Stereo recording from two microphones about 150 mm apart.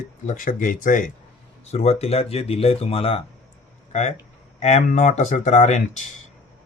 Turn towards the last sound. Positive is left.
turn(degrees=50)  # may be behind; listen again after turning